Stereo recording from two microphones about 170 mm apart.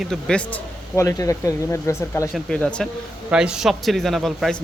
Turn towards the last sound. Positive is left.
turn(degrees=0)  # may be behind; listen again after turning